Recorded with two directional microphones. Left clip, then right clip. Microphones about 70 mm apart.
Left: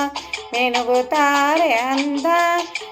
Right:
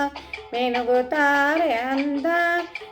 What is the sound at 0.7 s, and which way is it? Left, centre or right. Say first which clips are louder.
Music: left 2 dB; centre.